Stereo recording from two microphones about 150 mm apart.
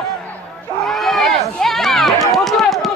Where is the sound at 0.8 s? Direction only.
Centre (ahead or behind).